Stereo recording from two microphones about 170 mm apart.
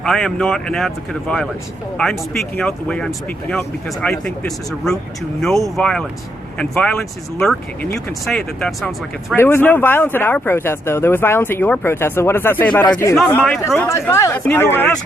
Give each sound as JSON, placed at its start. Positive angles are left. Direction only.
{"t": 0.0, "sound": "speech", "side_deg": 5}
{"t": 13.8, "sound": "speech", "side_deg": 15}